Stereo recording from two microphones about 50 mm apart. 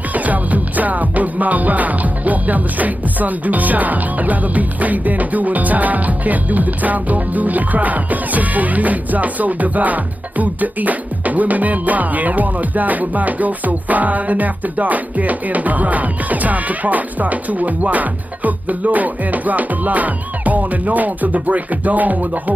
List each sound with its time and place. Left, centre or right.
0.1 s music: right